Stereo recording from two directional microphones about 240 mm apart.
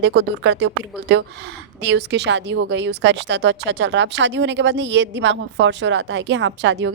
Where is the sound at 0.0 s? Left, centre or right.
Right.